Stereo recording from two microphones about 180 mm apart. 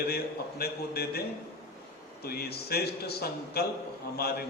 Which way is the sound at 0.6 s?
60° left (ahead or behind).